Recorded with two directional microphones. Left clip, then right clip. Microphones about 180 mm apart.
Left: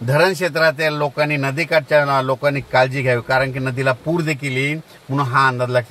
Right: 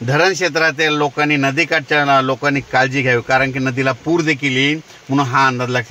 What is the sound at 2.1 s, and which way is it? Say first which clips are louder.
Speech: right 4 dB; 55° right (ahead or behind).